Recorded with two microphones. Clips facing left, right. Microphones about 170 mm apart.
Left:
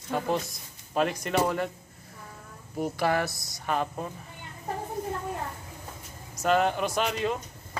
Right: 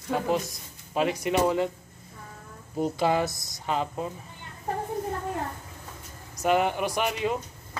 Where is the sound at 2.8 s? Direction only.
20° right (ahead or behind).